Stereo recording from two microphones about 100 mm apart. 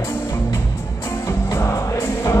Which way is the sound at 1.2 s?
30° left (ahead or behind).